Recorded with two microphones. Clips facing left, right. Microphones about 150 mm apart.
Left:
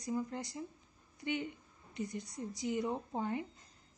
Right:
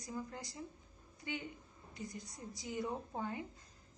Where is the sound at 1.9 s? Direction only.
20° left (ahead or behind).